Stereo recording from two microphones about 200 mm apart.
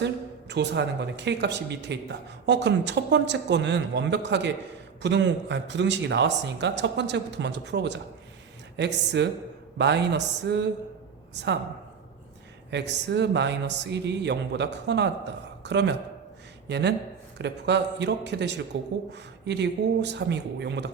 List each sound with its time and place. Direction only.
0.0 s speech: 60° right (ahead or behind)
12.7 s speech: 60° right (ahead or behind)